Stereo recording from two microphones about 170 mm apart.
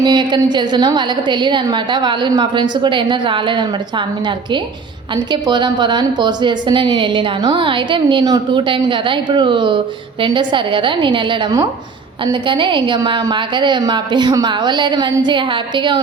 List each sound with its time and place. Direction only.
0.0 s a woman's voice: 25° right (ahead or behind)